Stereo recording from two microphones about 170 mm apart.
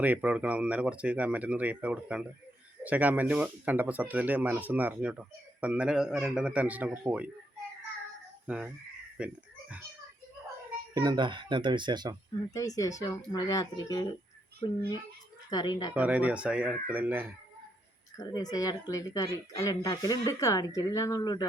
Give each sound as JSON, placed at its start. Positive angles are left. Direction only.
{"t": 0.0, "sound": "speech", "side_deg": -10}
{"t": 8.4, "sound": "speech", "side_deg": -5}
{"t": 9.1, "sound": "a sound", "side_deg": -5}
{"t": 10.9, "sound": "speech", "side_deg": -25}
{"t": 12.5, "sound": "speech", "side_deg": 20}
{"t": 15.4, "sound": "speech", "side_deg": 25}
{"t": 16.0, "sound": "speech", "side_deg": -10}
{"t": 18.2, "sound": "speech", "side_deg": 20}